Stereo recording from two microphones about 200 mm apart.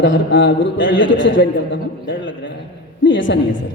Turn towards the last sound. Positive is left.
turn(degrees=65)  # may be behind; listen again after turning